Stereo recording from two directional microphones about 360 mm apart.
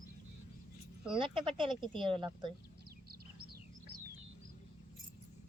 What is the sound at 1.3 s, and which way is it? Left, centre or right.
Speech, centre.